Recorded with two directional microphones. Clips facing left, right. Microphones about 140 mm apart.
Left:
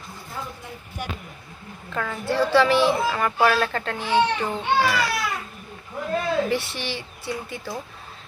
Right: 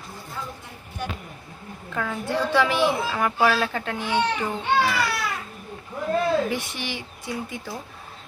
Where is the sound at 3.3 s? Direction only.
Centre (ahead or behind).